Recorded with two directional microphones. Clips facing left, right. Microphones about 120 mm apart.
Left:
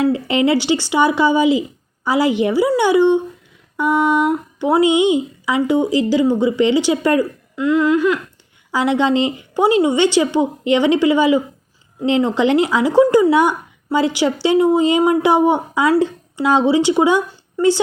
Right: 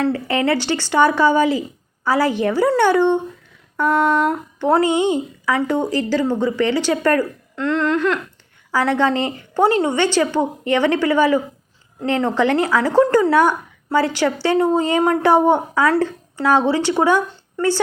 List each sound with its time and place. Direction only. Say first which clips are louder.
0.0 s speech: left 3 dB; 15° left (ahead or behind)